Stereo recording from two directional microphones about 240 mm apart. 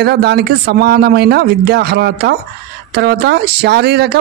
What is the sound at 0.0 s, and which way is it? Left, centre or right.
A woman's voice, right.